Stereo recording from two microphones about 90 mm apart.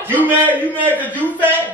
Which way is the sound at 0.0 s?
20° right (ahead or behind).